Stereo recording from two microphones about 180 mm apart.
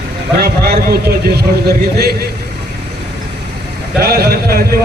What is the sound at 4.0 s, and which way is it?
Speech, 60° right (ahead or behind).